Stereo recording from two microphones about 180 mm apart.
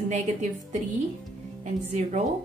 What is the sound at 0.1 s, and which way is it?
Speech, 40° right (ahead or behind).